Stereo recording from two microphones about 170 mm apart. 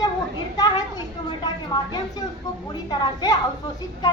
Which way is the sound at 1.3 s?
25° left (ahead or behind).